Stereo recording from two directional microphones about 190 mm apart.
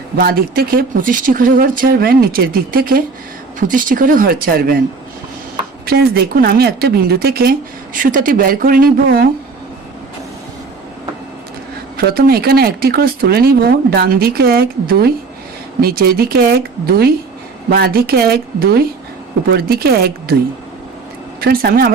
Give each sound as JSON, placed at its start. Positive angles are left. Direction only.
{"t": 0.2, "sound": "speech", "side_deg": -50}
{"t": 5.8, "sound": "a woman's voice", "side_deg": -55}
{"t": 11.9, "sound": "speech", "side_deg": -55}
{"t": 21.4, "sound": "speech", "side_deg": -50}